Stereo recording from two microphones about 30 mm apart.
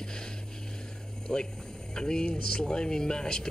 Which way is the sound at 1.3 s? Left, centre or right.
Left.